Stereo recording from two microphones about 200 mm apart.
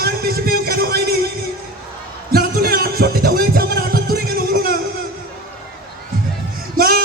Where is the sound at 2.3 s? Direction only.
50° right (ahead or behind).